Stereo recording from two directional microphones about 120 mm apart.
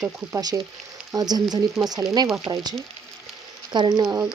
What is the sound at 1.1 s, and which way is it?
Speech, 35° right (ahead or behind).